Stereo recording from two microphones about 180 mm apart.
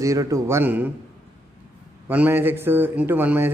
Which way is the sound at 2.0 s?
10° right (ahead or behind).